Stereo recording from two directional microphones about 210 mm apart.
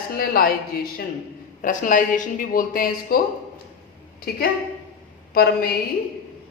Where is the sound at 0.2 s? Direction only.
45° left (ahead or behind).